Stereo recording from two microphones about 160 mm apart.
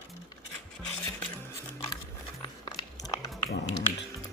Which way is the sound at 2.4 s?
25° left (ahead or behind).